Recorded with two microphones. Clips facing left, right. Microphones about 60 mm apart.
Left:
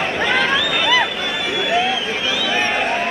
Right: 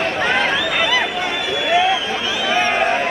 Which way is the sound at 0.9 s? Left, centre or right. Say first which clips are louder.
Left 1 dB; right.